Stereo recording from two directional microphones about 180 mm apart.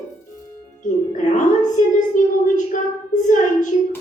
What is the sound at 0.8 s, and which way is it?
Music, 45° left (ahead or behind).